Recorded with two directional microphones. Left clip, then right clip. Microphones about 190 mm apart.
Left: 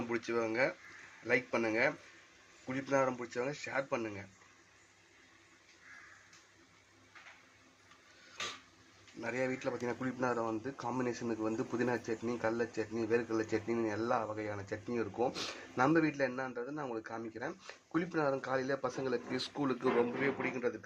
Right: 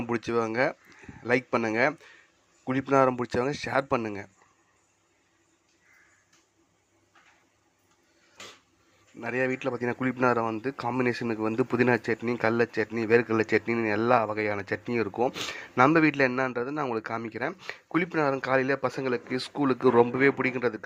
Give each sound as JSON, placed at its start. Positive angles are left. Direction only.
{"t": 0.1, "sound": "speech", "side_deg": -35}
{"t": 9.2, "sound": "a man's voice", "side_deg": -25}